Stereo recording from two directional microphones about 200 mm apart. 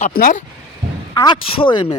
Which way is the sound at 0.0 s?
45° left (ahead or behind).